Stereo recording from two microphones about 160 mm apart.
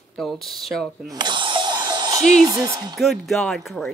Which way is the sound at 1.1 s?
30° right (ahead or behind).